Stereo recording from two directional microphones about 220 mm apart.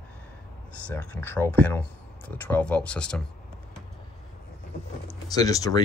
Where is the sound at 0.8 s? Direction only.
5° left (ahead or behind).